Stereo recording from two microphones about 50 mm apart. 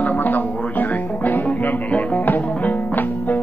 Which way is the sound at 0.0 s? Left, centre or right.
Left.